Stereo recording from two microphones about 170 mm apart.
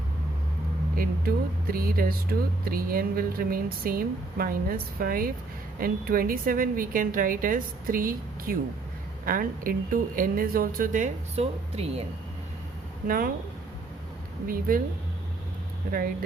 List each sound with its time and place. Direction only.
0.9 s speech: 60° right (ahead or behind); by 12.0 s 40° right (ahead or behind)
13.1 s speech: 55° right (ahead or behind)
14.4 s speech: 55° right (ahead or behind)